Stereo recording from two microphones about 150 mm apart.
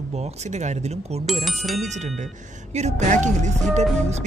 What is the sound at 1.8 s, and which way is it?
Speech, 50° right (ahead or behind).